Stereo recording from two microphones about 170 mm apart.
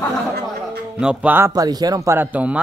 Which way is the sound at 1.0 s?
5° right (ahead or behind).